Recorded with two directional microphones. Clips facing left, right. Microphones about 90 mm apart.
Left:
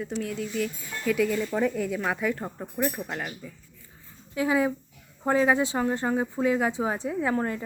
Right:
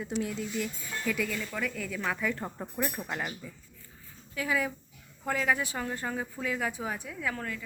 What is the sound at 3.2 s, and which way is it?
Speech, 5° right (ahead or behind).